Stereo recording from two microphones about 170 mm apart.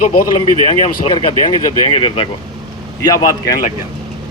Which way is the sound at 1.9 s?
30° left (ahead or behind).